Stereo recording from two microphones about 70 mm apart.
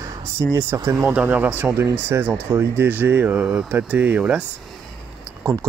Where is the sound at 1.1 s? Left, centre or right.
Right.